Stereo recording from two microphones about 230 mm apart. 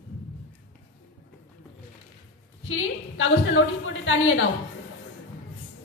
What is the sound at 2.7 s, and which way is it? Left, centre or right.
A woman's voice, left.